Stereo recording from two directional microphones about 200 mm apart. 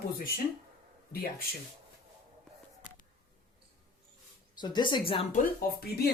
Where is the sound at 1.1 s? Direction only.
45° left (ahead or behind).